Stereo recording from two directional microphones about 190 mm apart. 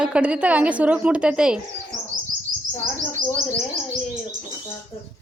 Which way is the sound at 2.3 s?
45° right (ahead or behind).